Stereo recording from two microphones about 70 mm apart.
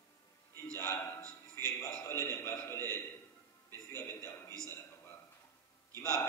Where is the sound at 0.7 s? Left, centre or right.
Left.